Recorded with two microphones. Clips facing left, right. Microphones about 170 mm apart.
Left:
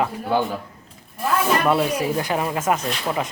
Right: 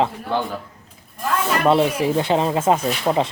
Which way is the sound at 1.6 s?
25° right (ahead or behind).